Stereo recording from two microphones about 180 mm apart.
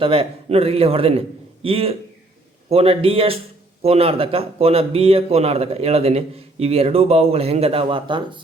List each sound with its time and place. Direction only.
0.0 s a man's voice: 30° right (ahead or behind)